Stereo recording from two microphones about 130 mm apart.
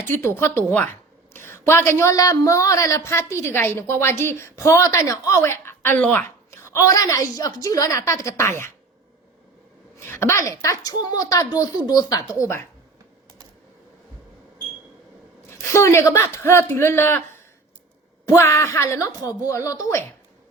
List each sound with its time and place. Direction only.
0.0 s speech: 20° left (ahead or behind)
10.0 s speech: 20° left (ahead or behind)
15.6 s speech: 20° left (ahead or behind)